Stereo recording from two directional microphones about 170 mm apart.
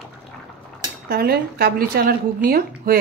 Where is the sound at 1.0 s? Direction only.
65° right (ahead or behind).